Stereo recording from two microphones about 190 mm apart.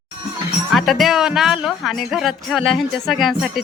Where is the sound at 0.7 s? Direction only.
Centre (ahead or behind).